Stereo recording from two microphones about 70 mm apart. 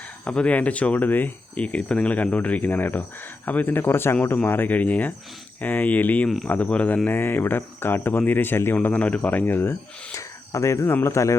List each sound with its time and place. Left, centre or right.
0.3 s speech: centre
7.1 s speech: left
10.2 s cricket: left
10.9 s speech: left